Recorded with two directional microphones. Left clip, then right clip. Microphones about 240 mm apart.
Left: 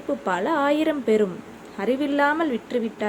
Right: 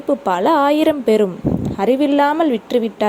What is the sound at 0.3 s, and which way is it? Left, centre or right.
A woman's voice, right.